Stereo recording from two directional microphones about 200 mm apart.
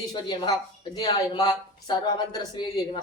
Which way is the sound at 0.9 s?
20° left (ahead or behind).